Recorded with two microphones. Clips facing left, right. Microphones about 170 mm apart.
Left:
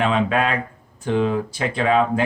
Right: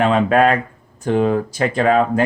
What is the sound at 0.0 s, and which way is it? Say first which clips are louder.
Speech: right 6 dB; 45° right (ahead or behind).